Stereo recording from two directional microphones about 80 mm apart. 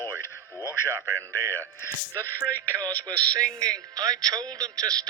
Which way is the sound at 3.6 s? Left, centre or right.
Right.